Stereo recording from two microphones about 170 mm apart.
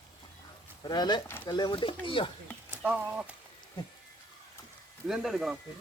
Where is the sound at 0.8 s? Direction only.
25° left (ahead or behind).